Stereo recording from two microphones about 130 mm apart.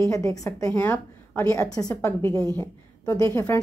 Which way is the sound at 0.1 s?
25° left (ahead or behind).